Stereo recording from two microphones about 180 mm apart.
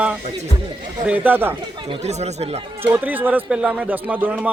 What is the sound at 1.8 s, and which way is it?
Speech, 35° right (ahead or behind).